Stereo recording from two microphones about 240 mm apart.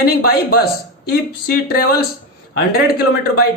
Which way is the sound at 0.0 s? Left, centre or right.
Left.